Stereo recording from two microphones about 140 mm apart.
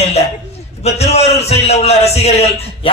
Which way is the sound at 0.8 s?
50° left (ahead or behind).